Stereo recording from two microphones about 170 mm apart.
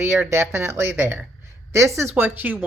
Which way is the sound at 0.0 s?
15° right (ahead or behind).